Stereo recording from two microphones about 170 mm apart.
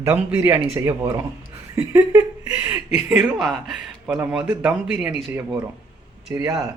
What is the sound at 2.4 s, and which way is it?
A man's voice, 10° right (ahead or behind).